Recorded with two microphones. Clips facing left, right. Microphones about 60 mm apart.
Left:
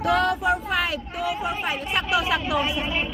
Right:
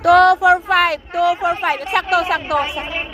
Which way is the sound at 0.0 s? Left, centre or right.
Right.